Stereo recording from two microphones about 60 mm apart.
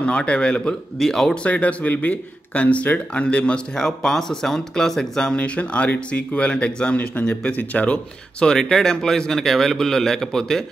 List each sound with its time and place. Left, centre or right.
0.0 s speech: centre
0.9 s speech: centre
1.3 s speech: left